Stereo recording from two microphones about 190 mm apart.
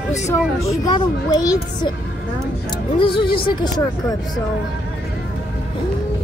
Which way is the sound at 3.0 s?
25° left (ahead or behind).